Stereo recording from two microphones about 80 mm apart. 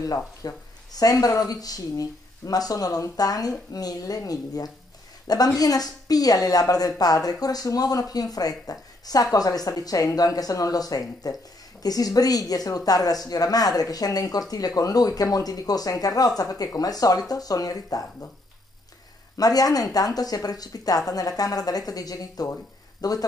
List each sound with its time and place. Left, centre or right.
0.0 s a woman's voice: left
19.3 s a woman's voice: left